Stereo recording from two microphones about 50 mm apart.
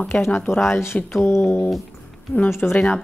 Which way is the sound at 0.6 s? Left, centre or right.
Left.